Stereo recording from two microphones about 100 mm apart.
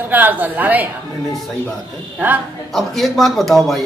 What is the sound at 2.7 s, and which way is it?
Speech, centre (ahead or behind).